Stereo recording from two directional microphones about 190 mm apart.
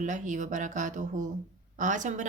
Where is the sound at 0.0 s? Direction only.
40° right (ahead or behind).